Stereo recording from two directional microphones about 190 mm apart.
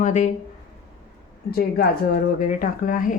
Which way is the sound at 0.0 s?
40° left (ahead or behind).